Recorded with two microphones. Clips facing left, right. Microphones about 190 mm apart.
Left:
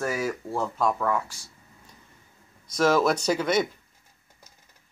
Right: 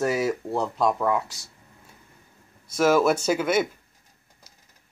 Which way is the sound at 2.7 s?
5° right (ahead or behind).